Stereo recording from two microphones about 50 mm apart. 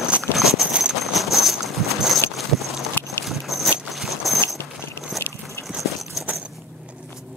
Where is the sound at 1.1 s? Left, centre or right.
Centre.